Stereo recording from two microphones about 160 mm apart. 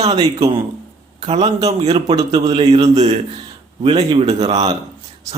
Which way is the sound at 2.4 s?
40° right (ahead or behind).